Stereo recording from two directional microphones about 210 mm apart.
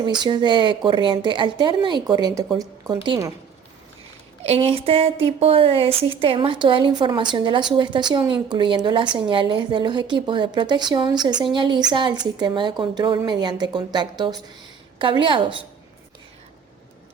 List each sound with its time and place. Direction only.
0.0 s a woman's voice: 20° right (ahead or behind)
4.4 s speech: 25° right (ahead or behind)